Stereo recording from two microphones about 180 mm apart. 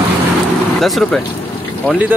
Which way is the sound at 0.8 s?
Centre (ahead or behind).